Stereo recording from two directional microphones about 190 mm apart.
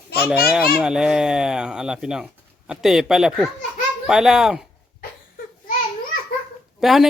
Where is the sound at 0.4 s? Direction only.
5° right (ahead or behind).